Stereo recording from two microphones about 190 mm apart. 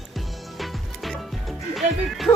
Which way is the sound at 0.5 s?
Centre (ahead or behind).